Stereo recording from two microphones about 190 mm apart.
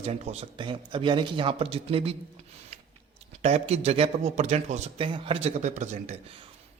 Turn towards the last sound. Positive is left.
turn(degrees=-40)  # may be behind; listen again after turning